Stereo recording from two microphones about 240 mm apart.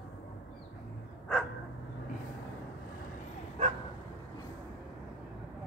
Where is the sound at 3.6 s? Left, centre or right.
Right.